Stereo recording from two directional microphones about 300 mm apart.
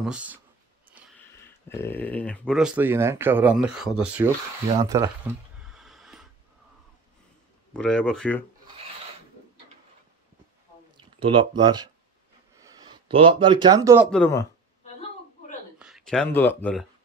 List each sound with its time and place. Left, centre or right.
0.0 s speech: centre
1.7 s speech: centre
4.8 s a sound: centre
7.7 s speech: centre
11.0 s speech: centre
15.8 s speech: centre